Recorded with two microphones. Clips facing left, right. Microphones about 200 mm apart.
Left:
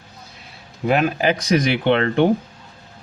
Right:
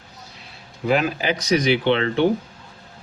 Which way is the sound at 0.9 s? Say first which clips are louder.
Left 2 dB; 50° left (ahead or behind).